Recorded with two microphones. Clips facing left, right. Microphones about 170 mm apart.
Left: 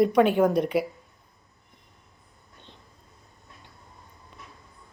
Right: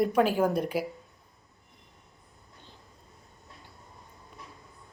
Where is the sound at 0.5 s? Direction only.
70° left (ahead or behind).